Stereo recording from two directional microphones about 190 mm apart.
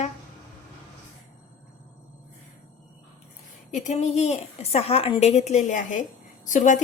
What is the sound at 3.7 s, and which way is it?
A woman's voice, 40° left (ahead or behind).